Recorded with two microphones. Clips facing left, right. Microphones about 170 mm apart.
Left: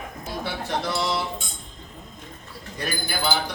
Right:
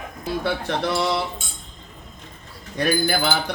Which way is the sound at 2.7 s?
65° right (ahead or behind).